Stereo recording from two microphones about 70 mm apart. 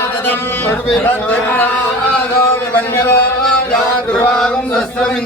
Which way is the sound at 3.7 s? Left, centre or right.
Centre.